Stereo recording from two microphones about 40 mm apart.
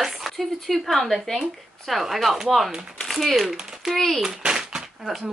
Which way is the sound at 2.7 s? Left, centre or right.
Centre.